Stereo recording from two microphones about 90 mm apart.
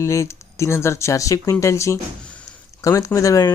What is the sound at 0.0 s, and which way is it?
Speech, 30° left (ahead or behind).